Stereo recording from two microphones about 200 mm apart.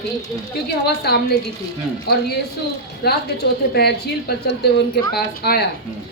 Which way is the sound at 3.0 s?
50° left (ahead or behind).